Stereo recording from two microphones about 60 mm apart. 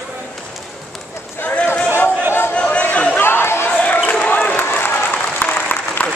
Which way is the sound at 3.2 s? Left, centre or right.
Left.